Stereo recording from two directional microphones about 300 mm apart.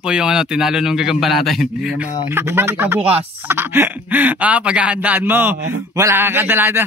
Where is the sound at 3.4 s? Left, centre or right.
Centre.